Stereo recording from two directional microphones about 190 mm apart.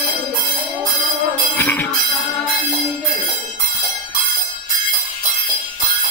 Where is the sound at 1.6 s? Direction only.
10° left (ahead or behind).